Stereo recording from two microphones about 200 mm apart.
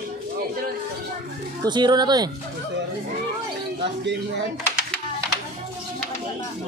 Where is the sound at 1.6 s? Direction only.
20° right (ahead or behind).